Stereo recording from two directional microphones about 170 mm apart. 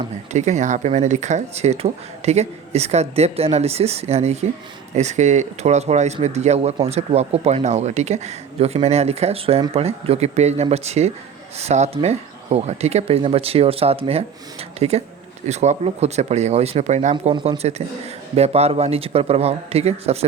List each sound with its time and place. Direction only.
0.3 s speech: 40° right (ahead or behind)
17.3 s speech: 30° right (ahead or behind)